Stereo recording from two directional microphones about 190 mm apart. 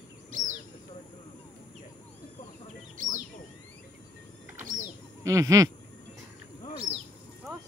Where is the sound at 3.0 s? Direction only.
45° right (ahead or behind).